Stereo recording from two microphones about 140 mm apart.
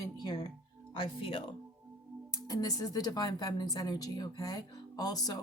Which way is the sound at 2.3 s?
25° left (ahead or behind).